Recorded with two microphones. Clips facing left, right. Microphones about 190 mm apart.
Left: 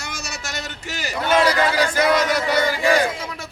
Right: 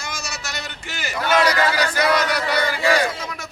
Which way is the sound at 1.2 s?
20° left (ahead or behind).